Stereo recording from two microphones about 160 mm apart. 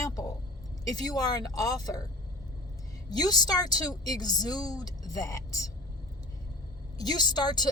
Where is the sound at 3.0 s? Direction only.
25° left (ahead or behind).